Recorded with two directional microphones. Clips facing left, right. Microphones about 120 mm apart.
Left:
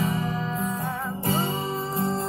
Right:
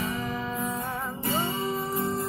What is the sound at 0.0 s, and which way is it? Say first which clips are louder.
Music: left 4 dB; 30° left (ahead or behind).